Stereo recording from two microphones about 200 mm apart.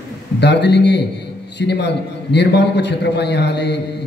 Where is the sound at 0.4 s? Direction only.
60° left (ahead or behind).